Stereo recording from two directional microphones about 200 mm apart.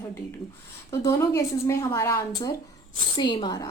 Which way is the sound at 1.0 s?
15° left (ahead or behind).